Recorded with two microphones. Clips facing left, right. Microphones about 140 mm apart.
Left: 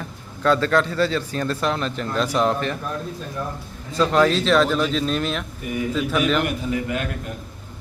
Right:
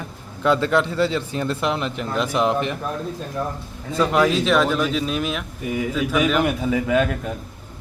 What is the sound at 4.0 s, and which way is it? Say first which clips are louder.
A man's voice: even; 10° right (ahead or behind).